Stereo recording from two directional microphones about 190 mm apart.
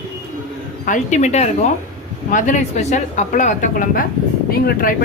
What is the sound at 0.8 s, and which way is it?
Speech, 40° left (ahead or behind).